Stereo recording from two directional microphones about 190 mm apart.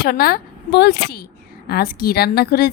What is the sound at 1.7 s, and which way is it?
A woman's voice, 55° left (ahead or behind).